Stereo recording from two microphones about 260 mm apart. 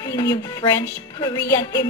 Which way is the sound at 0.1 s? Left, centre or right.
Centre.